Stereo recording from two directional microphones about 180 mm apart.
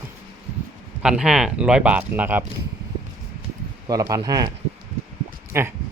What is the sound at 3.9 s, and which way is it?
Speech, 20° right (ahead or behind).